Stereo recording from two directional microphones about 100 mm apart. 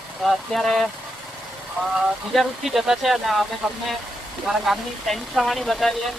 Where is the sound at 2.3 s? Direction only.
Centre (ahead or behind).